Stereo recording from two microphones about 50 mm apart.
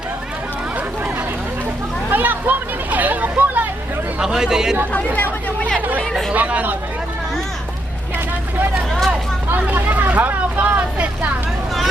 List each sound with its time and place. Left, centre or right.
2.0 s a sound: right
4.2 s speech: centre
4.9 s speech: left
6.0 s chatter: centre
6.3 s chatter: right
9.7 s vehicle: right